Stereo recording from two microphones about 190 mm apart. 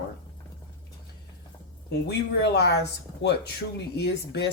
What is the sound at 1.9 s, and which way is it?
Speech, 60° left (ahead or behind).